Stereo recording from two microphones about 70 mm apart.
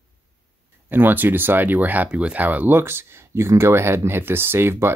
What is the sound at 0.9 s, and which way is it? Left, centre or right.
Speech, right.